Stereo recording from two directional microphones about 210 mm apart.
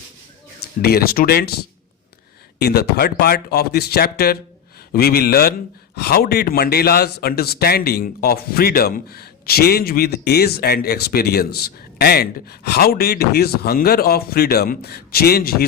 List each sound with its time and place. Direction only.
0.8 s a man's voice: 45° left (ahead or behind)
2.6 s a man's voice: 50° left (ahead or behind)